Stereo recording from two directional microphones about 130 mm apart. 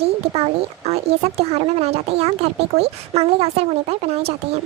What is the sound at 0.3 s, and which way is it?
Speech, 50° right (ahead or behind).